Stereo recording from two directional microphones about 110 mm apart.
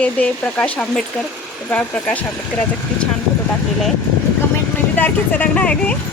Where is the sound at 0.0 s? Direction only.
10° left (ahead or behind).